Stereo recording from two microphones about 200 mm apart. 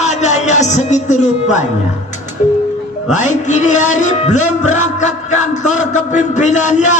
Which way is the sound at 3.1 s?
35° left (ahead or behind).